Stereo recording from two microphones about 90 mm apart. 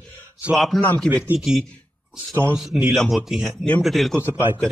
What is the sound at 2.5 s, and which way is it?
Speech, 5° right (ahead or behind).